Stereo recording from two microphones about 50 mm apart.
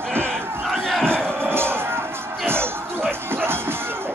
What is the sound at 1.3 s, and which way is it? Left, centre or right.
Speech, right.